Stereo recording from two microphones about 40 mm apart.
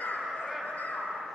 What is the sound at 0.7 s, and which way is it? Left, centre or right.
Bow-wow, left.